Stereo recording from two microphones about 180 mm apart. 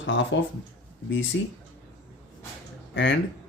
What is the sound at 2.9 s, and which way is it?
Speech, 80° left.